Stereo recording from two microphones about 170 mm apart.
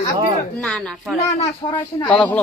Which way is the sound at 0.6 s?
5° left (ahead or behind).